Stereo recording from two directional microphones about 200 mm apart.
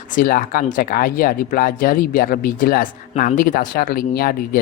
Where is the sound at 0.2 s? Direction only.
45° left (ahead or behind).